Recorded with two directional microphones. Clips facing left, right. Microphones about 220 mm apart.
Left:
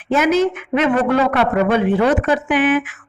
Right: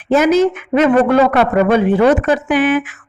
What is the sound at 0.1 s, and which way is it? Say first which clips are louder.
Speech: right 4 dB; 40° right (ahead or behind).